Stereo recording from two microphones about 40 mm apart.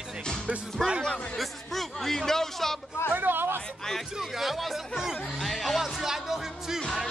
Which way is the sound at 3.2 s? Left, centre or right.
Right.